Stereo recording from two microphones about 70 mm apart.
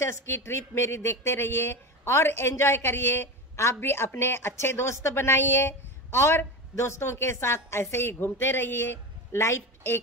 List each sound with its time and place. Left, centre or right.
0.0 s a woman's voice: left